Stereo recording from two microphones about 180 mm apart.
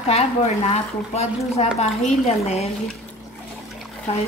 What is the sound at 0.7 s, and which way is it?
A woman's voice, 35° left (ahead or behind).